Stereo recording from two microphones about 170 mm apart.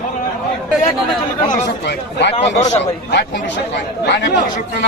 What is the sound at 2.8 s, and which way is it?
Speech, 85° left.